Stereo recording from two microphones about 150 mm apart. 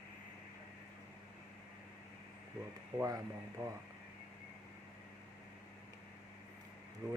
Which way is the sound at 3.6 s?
20° right (ahead or behind).